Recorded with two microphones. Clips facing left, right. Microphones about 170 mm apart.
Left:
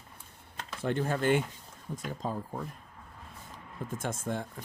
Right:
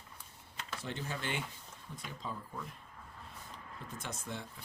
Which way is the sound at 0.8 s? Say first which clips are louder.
Left 13 dB; 50° left (ahead or behind).